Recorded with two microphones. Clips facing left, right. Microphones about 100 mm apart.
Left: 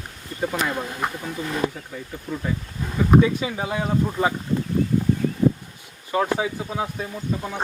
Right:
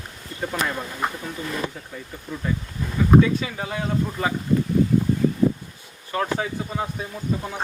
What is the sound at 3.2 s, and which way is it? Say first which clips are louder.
Speech: left 1 dB; 15° left (ahead or behind).